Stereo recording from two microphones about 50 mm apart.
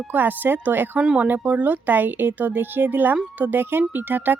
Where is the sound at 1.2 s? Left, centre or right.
Right.